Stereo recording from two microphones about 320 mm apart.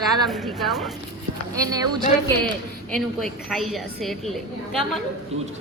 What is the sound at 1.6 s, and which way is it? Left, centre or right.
Speech, centre.